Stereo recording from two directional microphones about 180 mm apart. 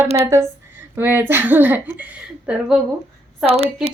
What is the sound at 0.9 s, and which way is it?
A woman's voice, 10° right (ahead or behind).